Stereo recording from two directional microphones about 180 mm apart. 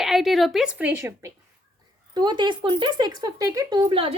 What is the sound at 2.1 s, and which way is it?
Speech, 25° right (ahead or behind).